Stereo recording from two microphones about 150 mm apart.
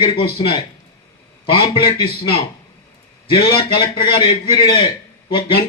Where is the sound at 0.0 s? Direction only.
40° left (ahead or behind).